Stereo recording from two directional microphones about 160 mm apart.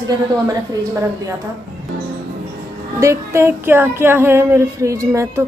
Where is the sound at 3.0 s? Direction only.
15° right (ahead or behind).